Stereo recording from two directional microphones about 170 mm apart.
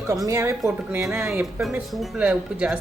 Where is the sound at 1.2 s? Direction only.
Centre (ahead or behind).